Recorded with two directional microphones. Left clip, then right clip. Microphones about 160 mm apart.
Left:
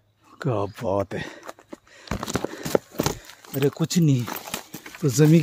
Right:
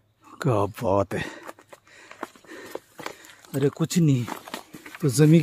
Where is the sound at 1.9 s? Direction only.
5° right (ahead or behind).